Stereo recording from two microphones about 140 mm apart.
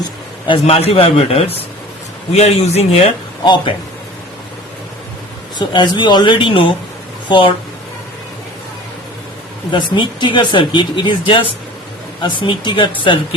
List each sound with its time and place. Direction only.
0.4 s a man's voice: 40° left (ahead or behind)
3.4 s speech: 30° left (ahead or behind)
5.5 s speech: 30° left (ahead or behind)
9.7 s speech: 35° left (ahead or behind)